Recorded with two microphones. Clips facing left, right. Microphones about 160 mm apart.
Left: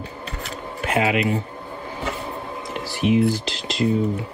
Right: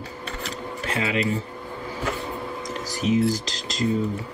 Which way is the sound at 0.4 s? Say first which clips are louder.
Left 2 dB; 35° right (ahead or behind).